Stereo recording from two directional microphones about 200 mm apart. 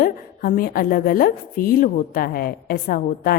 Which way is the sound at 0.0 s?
45° left (ahead or behind).